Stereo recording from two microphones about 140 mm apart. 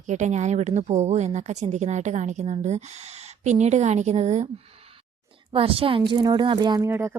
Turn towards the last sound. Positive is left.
turn(degrees=-20)  # may be behind; listen again after turning